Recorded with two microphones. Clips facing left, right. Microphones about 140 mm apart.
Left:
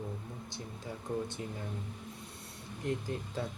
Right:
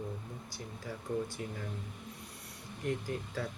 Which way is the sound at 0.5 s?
25° left (ahead or behind).